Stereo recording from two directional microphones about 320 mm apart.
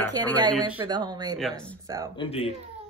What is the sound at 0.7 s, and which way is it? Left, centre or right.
Speech, centre.